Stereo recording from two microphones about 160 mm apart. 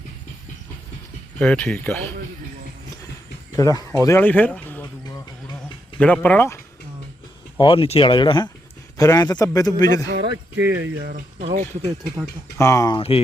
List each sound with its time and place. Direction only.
1.4 s speech: 5° left (ahead or behind)
3.5 s speech: 20° left (ahead or behind)
4.0 s a sound: 15° left (ahead or behind)
6.0 s speech: 10° left (ahead or behind)
7.6 s a man's voice: 35° left (ahead or behind)
10.1 s speech: 90° right
11.1 s speech: 45° right (ahead or behind)
12.5 s a man's voice: 20° left (ahead or behind)
13.0 s speech: 35° left (ahead or behind)